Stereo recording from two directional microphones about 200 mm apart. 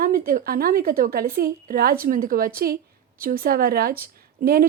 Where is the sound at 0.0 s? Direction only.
45° right (ahead or behind).